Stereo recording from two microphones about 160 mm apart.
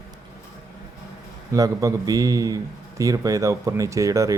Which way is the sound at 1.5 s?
20° right (ahead or behind).